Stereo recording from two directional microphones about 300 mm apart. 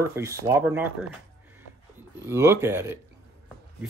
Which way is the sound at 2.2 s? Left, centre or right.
Centre.